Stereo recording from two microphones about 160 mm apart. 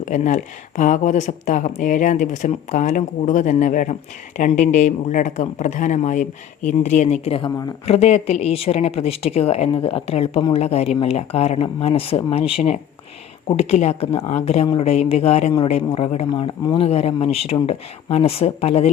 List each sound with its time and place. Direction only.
0.0 s a woman's voice: 50° left (ahead or behind)